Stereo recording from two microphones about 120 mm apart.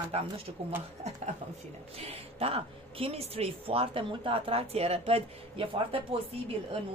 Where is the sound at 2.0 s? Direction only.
55° right (ahead or behind).